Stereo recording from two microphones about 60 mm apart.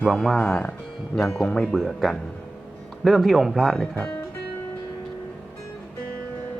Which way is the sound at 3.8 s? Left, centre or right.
Centre.